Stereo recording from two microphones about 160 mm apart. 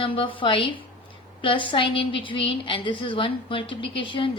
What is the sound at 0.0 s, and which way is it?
A woman's voice, 35° left (ahead or behind).